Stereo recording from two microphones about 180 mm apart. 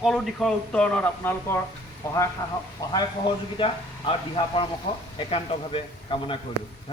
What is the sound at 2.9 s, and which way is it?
A man's voice, 25° left (ahead or behind).